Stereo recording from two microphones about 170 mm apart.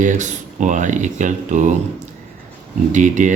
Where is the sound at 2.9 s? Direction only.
45° right (ahead or behind).